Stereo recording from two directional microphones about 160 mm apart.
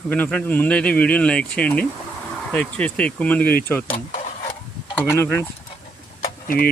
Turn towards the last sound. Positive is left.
turn(degrees=60)  # may be behind; listen again after turning